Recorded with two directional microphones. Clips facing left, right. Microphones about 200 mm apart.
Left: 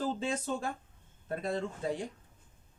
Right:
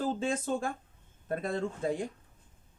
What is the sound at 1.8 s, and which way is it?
Speech, 50° right (ahead or behind).